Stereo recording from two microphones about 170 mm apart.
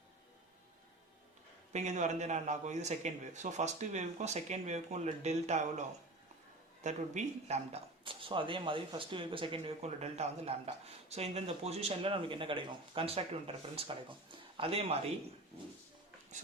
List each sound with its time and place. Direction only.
1.7 s a man's voice: 40° right (ahead or behind)
6.8 s speech: 45° right (ahead or behind)